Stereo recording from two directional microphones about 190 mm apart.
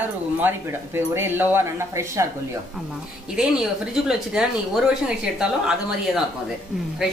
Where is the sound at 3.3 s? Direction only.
5° right (ahead or behind).